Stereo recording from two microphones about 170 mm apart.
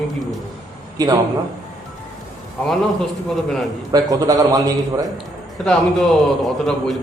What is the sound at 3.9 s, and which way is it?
A man's voice, 20° right (ahead or behind).